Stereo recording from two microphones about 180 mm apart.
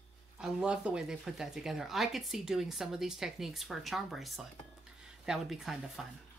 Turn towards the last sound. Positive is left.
turn(degrees=0)  # may be behind; listen again after turning